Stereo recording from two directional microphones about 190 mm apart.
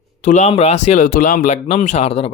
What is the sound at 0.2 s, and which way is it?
Speech, 40° left (ahead or behind).